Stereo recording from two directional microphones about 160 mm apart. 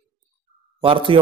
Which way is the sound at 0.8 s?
35° right (ahead or behind).